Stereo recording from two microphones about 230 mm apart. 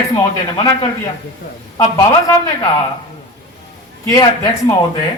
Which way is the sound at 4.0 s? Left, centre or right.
Centre.